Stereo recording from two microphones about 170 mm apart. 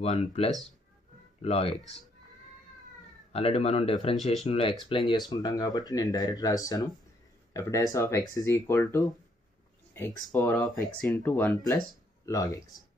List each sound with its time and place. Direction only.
0.0 s speech: 35° left (ahead or behind)
3.3 s speech: 35° left (ahead or behind)
4.2 s speech: centre (ahead or behind)
4.5 s speech: 35° left (ahead or behind)